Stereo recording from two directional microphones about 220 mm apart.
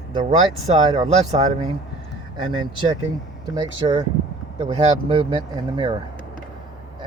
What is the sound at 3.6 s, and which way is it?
Speech, 20° right (ahead or behind).